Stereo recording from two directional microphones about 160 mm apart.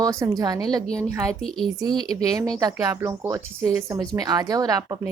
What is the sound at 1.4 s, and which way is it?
Speech, 5° left (ahead or behind).